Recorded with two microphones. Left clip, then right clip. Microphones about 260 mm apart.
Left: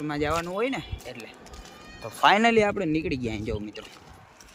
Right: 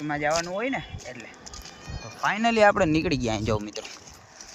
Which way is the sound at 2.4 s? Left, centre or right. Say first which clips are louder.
Right 3 dB; centre.